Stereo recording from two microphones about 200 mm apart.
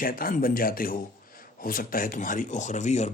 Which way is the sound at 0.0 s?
45° left (ahead or behind).